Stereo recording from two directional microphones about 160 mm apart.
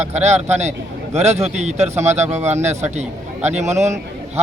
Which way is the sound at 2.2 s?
15° right (ahead or behind).